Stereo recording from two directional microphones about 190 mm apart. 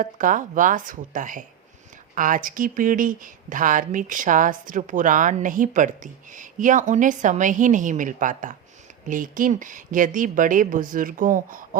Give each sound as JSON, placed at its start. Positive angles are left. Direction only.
{"t": 0.0, "sound": "a woman's voice", "side_deg": -45}